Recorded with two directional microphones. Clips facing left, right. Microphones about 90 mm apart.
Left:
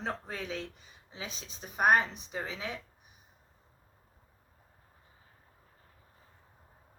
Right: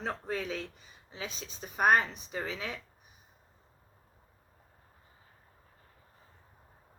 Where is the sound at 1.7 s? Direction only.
15° left (ahead or behind).